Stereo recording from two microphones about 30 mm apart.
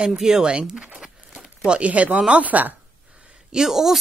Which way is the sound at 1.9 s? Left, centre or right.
Right.